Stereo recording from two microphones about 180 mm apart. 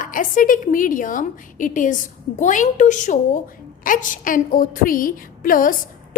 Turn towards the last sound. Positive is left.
turn(degrees=50)  # may be behind; listen again after turning